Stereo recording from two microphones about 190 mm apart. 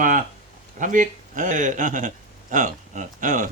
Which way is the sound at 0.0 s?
45° right (ahead or behind).